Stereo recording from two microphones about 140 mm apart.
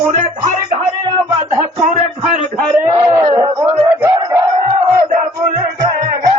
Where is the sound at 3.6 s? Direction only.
15° right (ahead or behind).